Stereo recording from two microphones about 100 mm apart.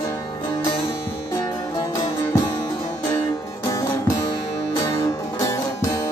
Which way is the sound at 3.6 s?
35° left (ahead or behind).